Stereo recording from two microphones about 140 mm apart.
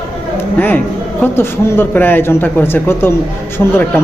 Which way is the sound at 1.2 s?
15° left (ahead or behind).